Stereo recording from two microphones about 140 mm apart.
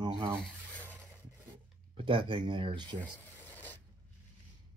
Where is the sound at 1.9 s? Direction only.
40° right (ahead or behind).